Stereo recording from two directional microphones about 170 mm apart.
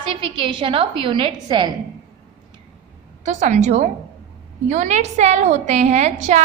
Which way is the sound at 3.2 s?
45° right (ahead or behind).